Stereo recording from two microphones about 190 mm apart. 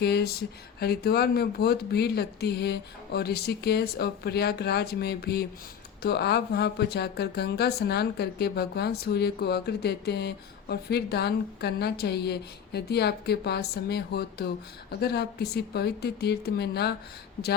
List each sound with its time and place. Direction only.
0.0 s speech: 55° left (ahead or behind)